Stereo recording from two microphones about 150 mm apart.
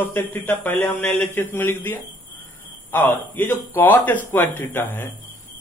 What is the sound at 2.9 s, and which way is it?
A man's voice, 10° left (ahead or behind).